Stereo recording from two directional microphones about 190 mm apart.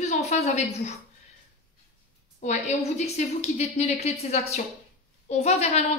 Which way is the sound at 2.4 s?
35° left (ahead or behind).